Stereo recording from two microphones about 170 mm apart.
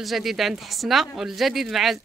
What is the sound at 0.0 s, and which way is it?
A woman's voice, centre (ahead or behind).